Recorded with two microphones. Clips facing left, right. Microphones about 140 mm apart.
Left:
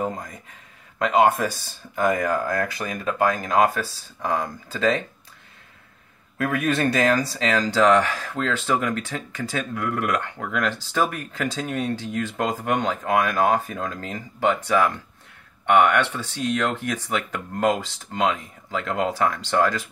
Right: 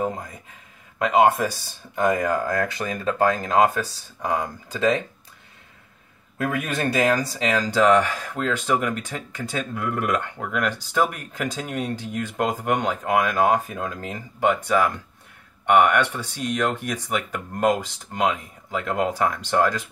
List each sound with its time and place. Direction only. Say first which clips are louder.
0.0 s speech: right 1 dB; 10° right (ahead or behind)
2.4 s speech: right 1 dB; 25° right (ahead or behind)
6.3 s speech: left 3 dB; 15° right (ahead or behind)